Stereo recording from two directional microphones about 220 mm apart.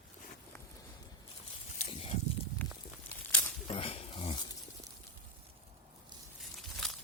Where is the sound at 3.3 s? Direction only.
10° left (ahead or behind).